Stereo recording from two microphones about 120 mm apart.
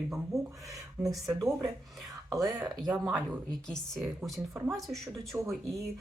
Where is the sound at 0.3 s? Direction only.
25° right (ahead or behind).